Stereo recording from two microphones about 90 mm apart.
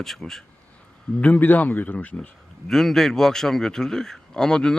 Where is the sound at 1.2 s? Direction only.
15° left (ahead or behind).